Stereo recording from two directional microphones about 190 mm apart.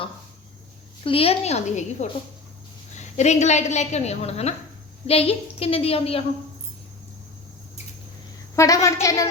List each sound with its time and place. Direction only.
1.0 s a woman's voice: 30° left (ahead or behind)
8.5 s a woman's voice: 15° left (ahead or behind)